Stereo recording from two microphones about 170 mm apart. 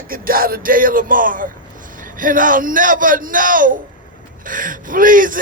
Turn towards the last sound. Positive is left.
turn(degrees=-55)  # may be behind; listen again after turning